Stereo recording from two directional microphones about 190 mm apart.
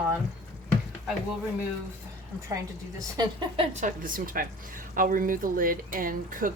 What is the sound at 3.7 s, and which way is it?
A woman's voice, 45° right (ahead or behind).